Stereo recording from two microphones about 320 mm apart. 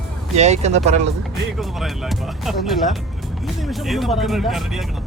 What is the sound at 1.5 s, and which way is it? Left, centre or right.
Speech, centre.